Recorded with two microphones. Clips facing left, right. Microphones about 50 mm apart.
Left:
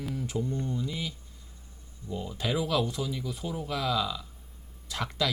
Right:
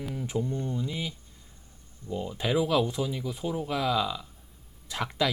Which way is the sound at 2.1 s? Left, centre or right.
Centre.